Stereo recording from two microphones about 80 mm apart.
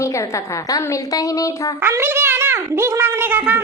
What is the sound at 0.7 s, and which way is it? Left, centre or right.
A woman's voice, left.